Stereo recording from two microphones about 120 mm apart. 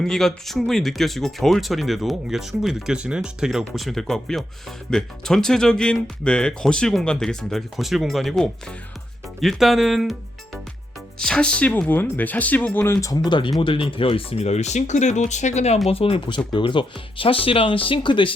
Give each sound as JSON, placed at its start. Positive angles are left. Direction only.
{"t": 0.0, "sound": "speech", "side_deg": 5}
{"t": 15.9, "sound": "speech", "side_deg": 55}